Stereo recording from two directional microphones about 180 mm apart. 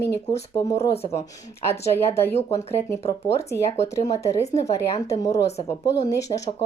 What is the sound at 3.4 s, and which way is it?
Speech, 15° left (ahead or behind).